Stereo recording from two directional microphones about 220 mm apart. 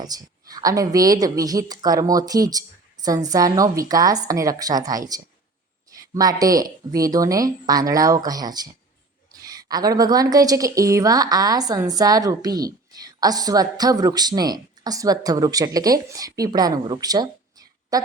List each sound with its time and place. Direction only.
0.0 s a woman's voice: 15° right (ahead or behind)